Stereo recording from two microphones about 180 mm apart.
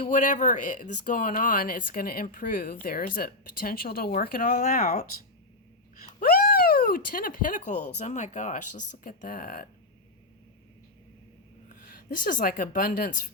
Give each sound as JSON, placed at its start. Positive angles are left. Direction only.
{"t": 0.0, "sound": "speech", "side_deg": 45}
{"t": 6.1, "sound": "speech", "side_deg": 55}
{"t": 11.7, "sound": "speech", "side_deg": 50}